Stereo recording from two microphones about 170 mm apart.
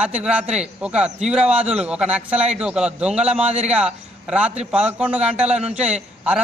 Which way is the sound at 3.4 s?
40° right (ahead or behind).